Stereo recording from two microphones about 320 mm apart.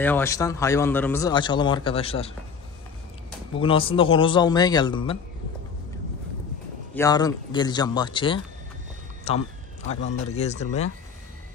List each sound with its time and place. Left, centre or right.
0.0 s a man's voice: centre
3.5 s a man's voice: centre
7.0 s a man's voice: centre